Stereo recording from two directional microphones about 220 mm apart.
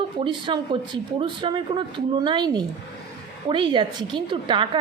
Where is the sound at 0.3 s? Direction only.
20° right (ahead or behind).